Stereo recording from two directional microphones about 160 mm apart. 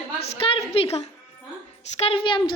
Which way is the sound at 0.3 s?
35° left (ahead or behind).